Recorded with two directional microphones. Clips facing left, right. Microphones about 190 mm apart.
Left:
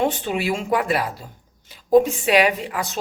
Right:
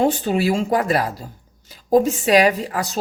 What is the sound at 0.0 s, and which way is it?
Speech, 40° right (ahead or behind).